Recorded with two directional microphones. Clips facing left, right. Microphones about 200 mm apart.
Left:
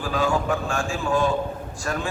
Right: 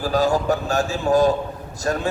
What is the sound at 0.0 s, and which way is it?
A man's voice, 40° right (ahead or behind).